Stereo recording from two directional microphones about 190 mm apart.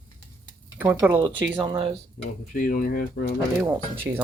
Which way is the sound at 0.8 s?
10° right (ahead or behind).